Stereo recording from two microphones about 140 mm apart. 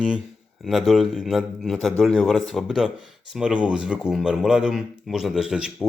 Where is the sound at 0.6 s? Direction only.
Centre (ahead or behind).